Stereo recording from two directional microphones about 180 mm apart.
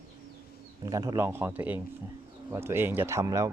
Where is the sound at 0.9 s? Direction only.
20° right (ahead or behind).